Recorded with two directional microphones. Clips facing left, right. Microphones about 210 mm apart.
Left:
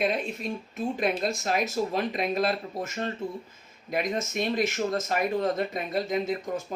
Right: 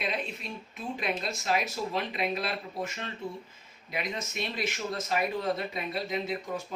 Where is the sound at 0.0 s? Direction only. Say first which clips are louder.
Left 7 dB; 45° left (ahead or behind).